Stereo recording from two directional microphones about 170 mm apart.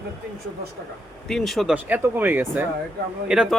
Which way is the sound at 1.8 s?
10° right (ahead or behind).